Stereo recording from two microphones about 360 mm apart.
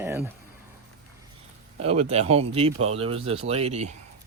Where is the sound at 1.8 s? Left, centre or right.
Centre.